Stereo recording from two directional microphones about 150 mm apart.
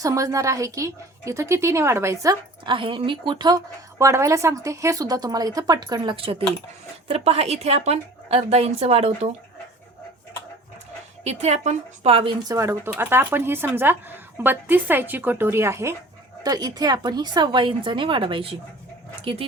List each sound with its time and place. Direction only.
0.0 s a woman's voice: 20° right (ahead or behind)
2.6 s a woman's voice: 35° right (ahead or behind)
3.9 s a woman's voice: 20° right (ahead or behind); by 9.3 s 45° right (ahead or behind)
11.2 s a woman's voice: 45° right (ahead or behind)
12.5 s a woman's voice: 20° right (ahead or behind); by 19.5 s 40° right (ahead or behind)